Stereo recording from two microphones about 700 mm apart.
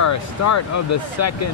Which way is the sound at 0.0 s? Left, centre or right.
Left.